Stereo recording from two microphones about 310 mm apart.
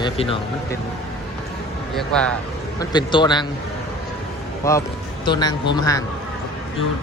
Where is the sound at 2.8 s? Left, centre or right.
Centre.